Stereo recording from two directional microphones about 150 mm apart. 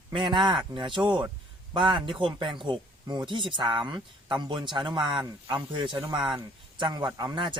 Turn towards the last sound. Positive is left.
turn(degrees=-30)  # may be behind; listen again after turning